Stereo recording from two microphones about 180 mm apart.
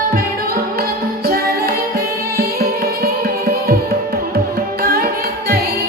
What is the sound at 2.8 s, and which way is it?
Music, 55° right (ahead or behind).